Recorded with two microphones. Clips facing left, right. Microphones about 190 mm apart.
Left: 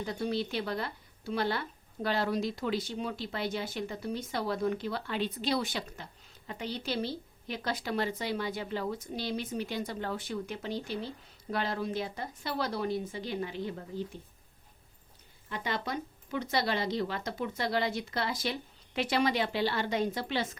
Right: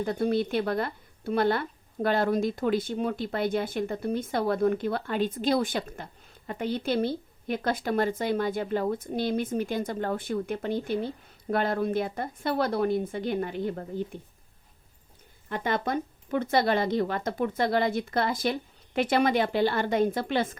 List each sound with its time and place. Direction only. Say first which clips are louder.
0.0 s speech: right 7 dB; 55° right (ahead or behind)
15.4 s speech: right 6 dB; 50° right (ahead or behind)